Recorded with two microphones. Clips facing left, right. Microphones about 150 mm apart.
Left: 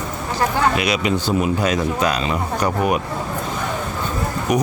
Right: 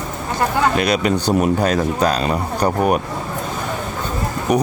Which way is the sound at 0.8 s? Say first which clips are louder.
Right 3 dB; 45° right (ahead or behind).